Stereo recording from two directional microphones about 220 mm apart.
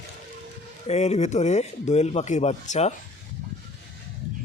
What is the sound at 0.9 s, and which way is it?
Speech, 30° left (ahead or behind).